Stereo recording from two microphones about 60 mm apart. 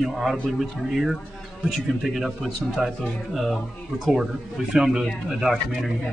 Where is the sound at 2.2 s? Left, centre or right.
Centre.